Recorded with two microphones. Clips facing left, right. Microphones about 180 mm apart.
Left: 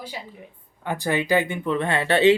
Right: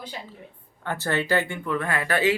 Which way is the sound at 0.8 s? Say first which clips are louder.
Left 2 dB; 15° left (ahead or behind).